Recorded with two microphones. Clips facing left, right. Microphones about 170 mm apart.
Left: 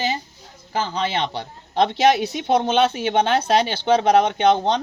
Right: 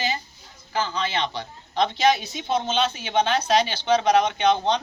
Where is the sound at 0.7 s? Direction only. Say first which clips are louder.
Left 3 dB; 55° left (ahead or behind).